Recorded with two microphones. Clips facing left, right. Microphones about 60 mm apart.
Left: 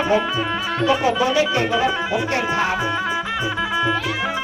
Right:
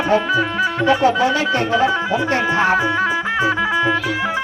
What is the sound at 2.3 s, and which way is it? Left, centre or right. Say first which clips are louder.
Speech: right 6 dB; right.